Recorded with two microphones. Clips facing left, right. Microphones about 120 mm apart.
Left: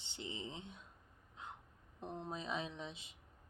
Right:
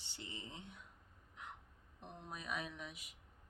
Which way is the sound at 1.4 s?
25° left (ahead or behind).